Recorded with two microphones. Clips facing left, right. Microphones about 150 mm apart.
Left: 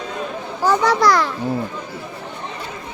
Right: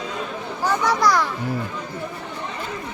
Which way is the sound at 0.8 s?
90° left.